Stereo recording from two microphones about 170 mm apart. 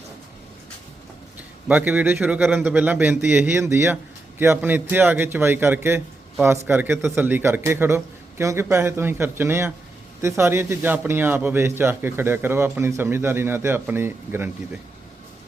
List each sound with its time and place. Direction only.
1.6 s a man's voice: 10° right (ahead or behind)